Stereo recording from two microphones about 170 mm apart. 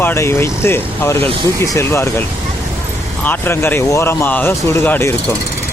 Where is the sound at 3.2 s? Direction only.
10° left (ahead or behind).